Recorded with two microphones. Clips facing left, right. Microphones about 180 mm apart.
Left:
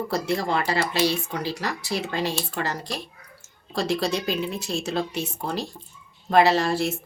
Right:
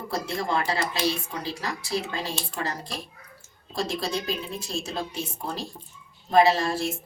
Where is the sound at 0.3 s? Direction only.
75° left (ahead or behind).